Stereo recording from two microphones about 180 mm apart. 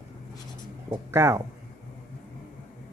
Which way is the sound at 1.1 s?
15° right (ahead or behind).